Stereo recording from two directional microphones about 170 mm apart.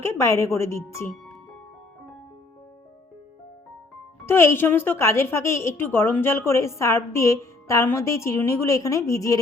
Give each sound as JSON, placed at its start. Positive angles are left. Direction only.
{"t": 0.0, "sound": "a woman's voice", "side_deg": 15}
{"t": 4.3, "sound": "a woman's voice", "side_deg": 15}